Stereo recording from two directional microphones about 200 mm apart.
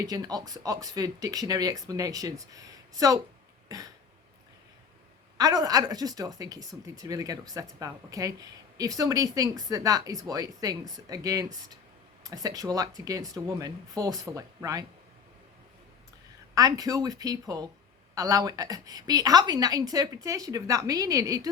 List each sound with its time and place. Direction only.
0.0 s speech: 20° right (ahead or behind)
5.4 s speech: 20° right (ahead or behind)
16.6 s speech: 20° right (ahead or behind)